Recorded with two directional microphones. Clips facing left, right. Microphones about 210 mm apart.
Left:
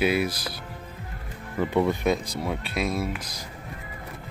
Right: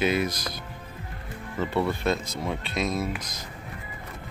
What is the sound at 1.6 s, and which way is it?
Speech, 15° left (ahead or behind).